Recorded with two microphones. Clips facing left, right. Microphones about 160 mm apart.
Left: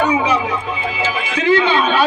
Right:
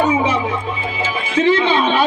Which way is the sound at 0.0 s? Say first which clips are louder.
Even; 25° right (ahead or behind).